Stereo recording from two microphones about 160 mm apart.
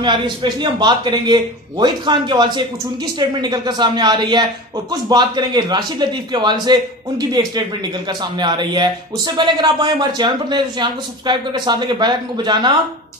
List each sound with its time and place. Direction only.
0.0 s speech: 30° right (ahead or behind)